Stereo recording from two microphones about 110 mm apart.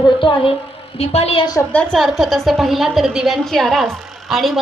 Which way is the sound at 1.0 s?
70° left (ahead or behind).